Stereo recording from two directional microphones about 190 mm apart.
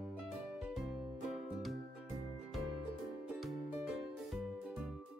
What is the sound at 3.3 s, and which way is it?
Music, centre (ahead or behind).